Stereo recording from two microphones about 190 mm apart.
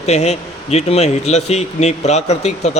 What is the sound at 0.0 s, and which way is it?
Speech, 35° left (ahead or behind).